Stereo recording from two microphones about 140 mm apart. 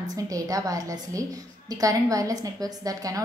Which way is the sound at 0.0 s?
25° right (ahead or behind).